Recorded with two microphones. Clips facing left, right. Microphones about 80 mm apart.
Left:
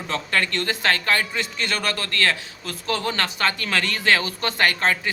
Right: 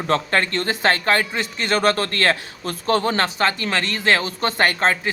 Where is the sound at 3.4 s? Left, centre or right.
Right.